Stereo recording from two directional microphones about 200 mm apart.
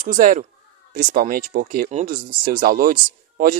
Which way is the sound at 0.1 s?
40° right (ahead or behind).